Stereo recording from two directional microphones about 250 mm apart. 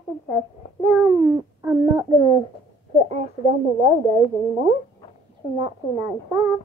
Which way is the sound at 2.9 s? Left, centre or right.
Right.